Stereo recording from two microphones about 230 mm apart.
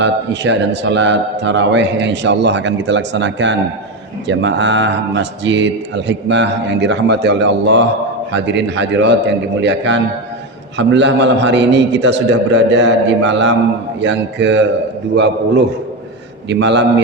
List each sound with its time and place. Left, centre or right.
0.0 s a man's voice: right